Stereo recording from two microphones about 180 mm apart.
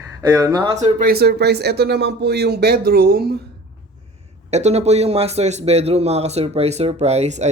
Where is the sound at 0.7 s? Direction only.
35° right (ahead or behind).